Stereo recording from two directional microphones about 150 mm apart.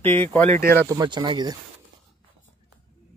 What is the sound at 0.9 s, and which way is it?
Speech, 25° right (ahead or behind).